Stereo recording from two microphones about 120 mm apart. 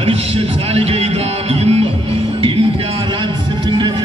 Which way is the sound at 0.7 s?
55° right (ahead or behind).